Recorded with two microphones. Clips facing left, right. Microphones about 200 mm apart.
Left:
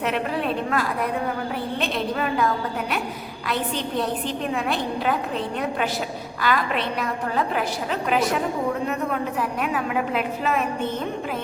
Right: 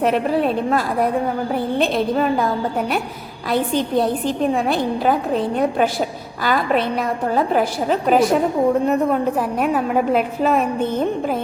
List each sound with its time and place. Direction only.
0.0 s a woman's voice: 40° right (ahead or behind)
4.5 s a woman's voice: 40° right (ahead or behind)
9.6 s a woman's voice: 45° right (ahead or behind)